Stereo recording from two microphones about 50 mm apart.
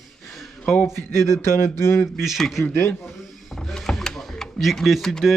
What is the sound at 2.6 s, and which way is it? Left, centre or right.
Speech, left.